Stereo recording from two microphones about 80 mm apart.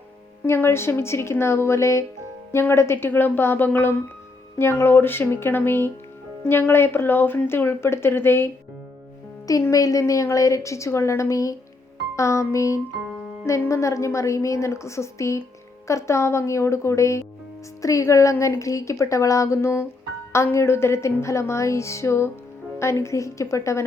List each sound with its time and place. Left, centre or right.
0.4 s a woman's voice: left
9.5 s a woman's voice: left